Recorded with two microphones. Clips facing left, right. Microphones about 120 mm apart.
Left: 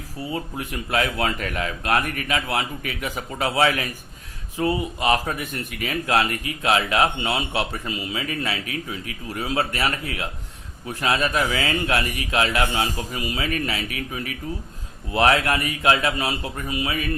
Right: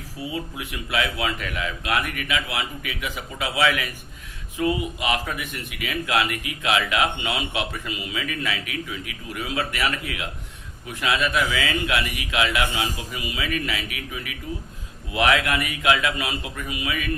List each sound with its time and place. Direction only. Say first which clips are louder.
0.3 s speech: left 2 dB; 40° left (ahead or behind)